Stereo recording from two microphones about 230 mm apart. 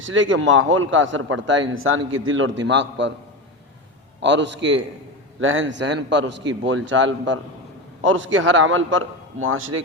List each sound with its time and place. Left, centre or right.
0.0 s a man's voice: right
4.2 s a man's voice: right